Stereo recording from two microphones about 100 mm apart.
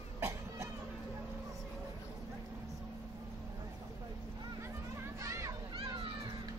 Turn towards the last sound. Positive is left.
turn(degrees=-60)  # may be behind; listen again after turning